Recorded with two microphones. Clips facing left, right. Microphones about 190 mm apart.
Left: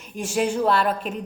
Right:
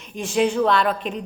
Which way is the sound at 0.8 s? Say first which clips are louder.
Right 1 dB; 5° left (ahead or behind).